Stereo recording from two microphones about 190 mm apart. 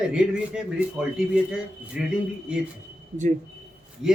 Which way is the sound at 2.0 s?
5° right (ahead or behind).